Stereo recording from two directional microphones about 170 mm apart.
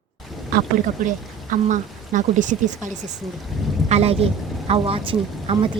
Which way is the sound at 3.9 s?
35° right (ahead or behind).